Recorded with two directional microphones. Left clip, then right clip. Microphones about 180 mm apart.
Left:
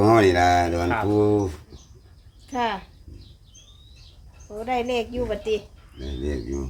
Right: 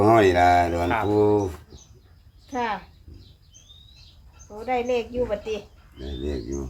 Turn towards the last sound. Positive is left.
turn(degrees=5)  # may be behind; listen again after turning